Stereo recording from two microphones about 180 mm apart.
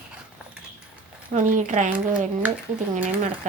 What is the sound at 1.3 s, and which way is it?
Speech, 45° right (ahead or behind).